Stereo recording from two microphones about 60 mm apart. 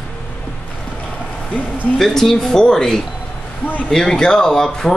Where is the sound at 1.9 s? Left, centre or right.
Centre.